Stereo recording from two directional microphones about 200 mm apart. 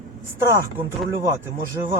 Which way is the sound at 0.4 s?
15° right (ahead or behind).